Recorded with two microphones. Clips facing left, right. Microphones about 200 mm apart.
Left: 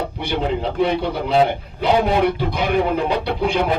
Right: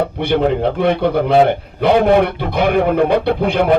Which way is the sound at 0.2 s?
55° right (ahead or behind).